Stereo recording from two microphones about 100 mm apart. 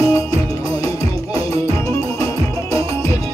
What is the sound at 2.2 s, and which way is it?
Music, 30° left (ahead or behind).